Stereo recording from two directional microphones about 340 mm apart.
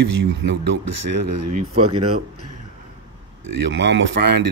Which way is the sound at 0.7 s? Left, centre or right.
Right.